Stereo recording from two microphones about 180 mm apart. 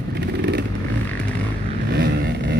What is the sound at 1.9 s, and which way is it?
Vehicle, 70° right (ahead or behind).